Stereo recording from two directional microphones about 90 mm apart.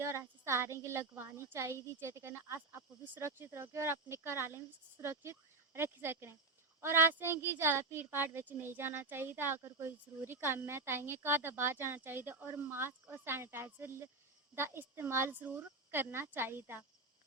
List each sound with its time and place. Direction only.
0.0 s a child's voice: 30° right (ahead or behind)